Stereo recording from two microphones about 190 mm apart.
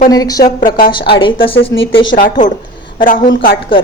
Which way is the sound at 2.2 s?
40° left (ahead or behind).